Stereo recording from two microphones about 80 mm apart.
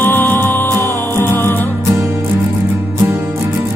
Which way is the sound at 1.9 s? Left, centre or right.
Right.